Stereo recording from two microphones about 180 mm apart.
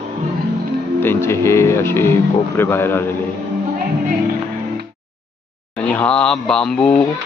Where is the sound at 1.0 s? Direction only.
15° left (ahead or behind).